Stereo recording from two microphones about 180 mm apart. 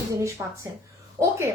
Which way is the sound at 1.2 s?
15° right (ahead or behind).